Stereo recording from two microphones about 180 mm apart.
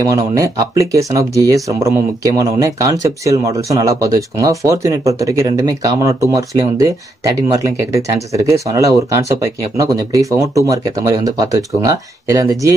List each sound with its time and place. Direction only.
0.3 s speech: 20° right (ahead or behind)